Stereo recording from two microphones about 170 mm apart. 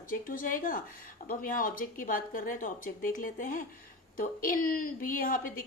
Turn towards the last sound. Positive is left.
turn(degrees=55)  # may be behind; listen again after turning